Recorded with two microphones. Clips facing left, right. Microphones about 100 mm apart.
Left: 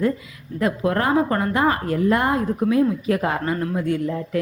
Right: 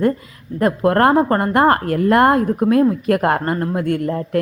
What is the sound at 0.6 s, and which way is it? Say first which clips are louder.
A woman's voice: right 7 dB; 55° right (ahead or behind).